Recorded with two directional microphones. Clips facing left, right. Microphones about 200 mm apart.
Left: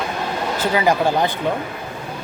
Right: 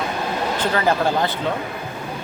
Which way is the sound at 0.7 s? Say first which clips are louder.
Left 3 dB; 15° left (ahead or behind).